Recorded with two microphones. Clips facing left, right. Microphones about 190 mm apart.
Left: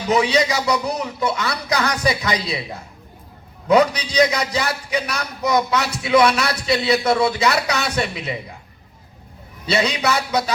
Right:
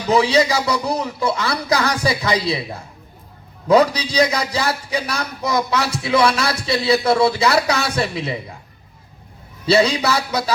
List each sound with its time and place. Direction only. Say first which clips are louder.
0.1 s a man's voice: right 2 dB; 30° right (ahead or behind)
3.7 s a man's voice: right 1 dB; 30° right (ahead or behind)
9.6 s a man's voice: right 4 dB; 30° right (ahead or behind)